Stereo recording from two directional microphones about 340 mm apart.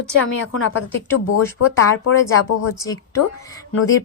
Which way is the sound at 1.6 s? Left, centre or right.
Left.